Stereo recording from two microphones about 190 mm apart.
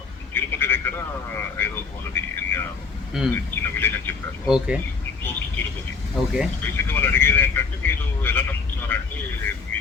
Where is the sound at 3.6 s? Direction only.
10° left (ahead or behind).